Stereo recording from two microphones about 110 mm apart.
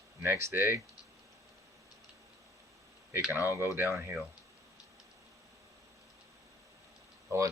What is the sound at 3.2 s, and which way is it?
Speech, 10° right (ahead or behind).